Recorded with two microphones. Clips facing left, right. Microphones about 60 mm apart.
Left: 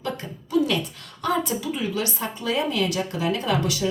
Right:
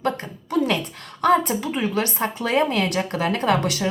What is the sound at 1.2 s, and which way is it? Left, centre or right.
A woman's voice, right.